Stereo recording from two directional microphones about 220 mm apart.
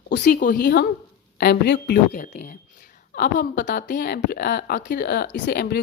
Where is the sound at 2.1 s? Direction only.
35° left (ahead or behind).